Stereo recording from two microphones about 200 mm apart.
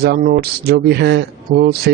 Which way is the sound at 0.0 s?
50° right (ahead or behind).